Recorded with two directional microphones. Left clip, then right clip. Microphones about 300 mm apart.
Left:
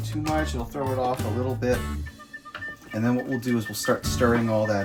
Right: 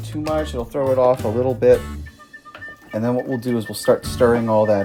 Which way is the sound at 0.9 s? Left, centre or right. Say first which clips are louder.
Right 11 dB; centre.